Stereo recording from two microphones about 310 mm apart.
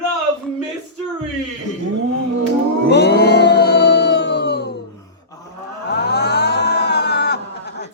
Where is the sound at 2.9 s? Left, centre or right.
Left.